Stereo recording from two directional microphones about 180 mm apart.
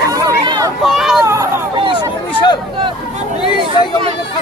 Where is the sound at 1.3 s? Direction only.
15° right (ahead or behind).